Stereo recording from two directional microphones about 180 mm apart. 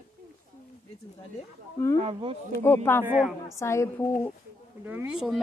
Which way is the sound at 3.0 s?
10° right (ahead or behind).